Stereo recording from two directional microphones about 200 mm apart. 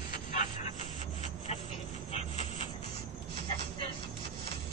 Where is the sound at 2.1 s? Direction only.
30° left (ahead or behind).